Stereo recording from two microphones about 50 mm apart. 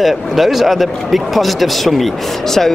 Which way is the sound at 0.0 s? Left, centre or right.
Centre.